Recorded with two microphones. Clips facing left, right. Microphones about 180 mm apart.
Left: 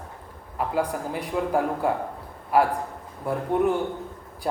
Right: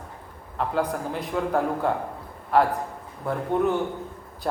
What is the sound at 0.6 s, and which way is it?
A man's voice, 5° left (ahead or behind).